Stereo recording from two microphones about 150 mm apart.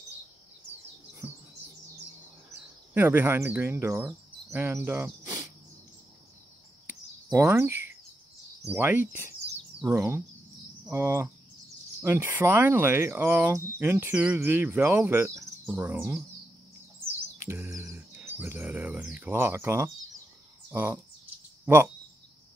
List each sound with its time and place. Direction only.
2.9 s speech: 10° right (ahead or behind)
7.2 s speech: 20° right (ahead or behind)
17.5 s bird: 20° right (ahead or behind)
17.9 s speech: 15° right (ahead or behind)